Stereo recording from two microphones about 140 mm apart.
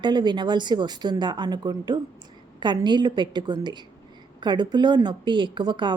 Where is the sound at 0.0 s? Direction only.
30° right (ahead or behind).